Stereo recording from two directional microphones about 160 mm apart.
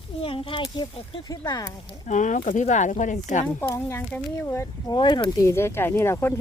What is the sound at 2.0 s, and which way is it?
Speech, 50° left (ahead or behind).